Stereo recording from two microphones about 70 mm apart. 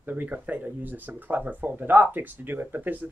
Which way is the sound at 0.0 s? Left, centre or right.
Right.